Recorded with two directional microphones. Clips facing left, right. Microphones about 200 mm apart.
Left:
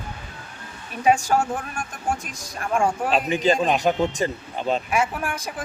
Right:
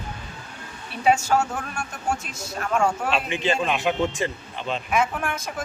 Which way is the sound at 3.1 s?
40° left (ahead or behind).